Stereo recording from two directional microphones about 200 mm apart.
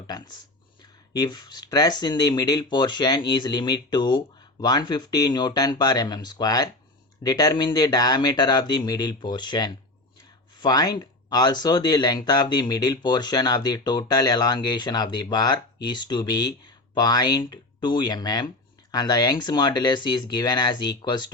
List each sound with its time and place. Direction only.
1.2 s speech: 20° left (ahead or behind)